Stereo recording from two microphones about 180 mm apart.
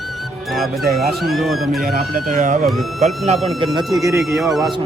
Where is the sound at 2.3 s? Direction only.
45° right (ahead or behind).